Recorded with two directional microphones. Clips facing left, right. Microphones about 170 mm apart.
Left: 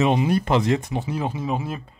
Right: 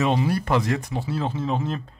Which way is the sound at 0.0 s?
20° left (ahead or behind).